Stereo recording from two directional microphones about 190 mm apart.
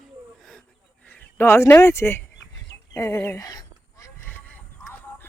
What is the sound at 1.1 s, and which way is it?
Speech, 10° left (ahead or behind).